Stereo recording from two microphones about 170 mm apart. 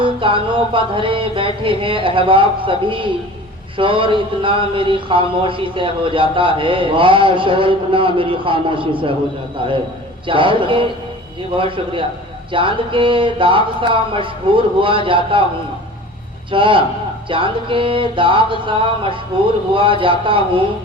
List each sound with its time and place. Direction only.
0.0 s speech: 30° right (ahead or behind)
10.2 s speech: 30° right (ahead or behind)
16.5 s speech: 30° right (ahead or behind)